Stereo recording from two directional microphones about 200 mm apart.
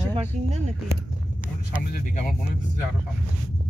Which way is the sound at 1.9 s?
45° left (ahead or behind).